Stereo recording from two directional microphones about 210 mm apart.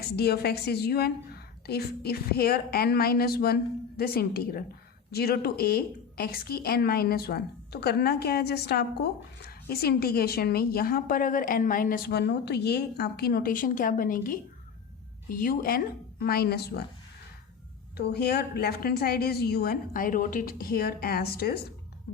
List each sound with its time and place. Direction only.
0.0 s a woman's voice: 50° left (ahead or behind)
17.9 s a woman's voice: 50° left (ahead or behind)